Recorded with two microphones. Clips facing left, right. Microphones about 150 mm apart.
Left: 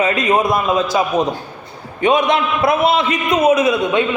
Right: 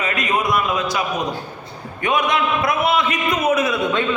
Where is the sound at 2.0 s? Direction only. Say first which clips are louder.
Left 5 dB; 25° left (ahead or behind).